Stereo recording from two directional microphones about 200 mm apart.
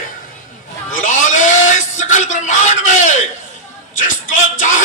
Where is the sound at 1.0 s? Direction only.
40° left (ahead or behind).